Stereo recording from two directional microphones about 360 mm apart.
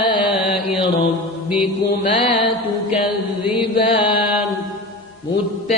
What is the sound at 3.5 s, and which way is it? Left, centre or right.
Mantra, centre.